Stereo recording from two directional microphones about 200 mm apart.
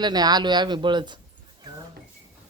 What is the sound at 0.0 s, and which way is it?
Speech, 20° right (ahead or behind).